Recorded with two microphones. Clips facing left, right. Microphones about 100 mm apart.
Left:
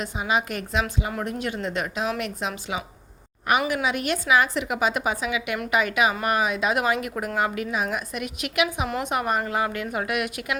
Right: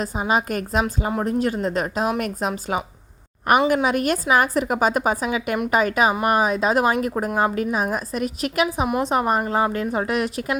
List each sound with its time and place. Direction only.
0.0 s a woman's voice: 40° right (ahead or behind)